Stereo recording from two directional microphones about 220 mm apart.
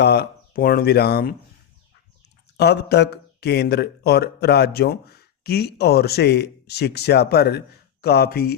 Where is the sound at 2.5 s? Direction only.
50° left (ahead or behind).